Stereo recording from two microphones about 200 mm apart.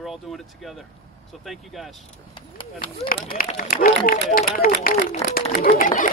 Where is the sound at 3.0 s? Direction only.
45° left (ahead or behind).